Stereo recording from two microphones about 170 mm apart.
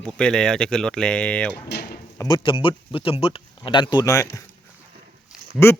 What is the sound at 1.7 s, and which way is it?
Drawer open or close, 70° left (ahead or behind).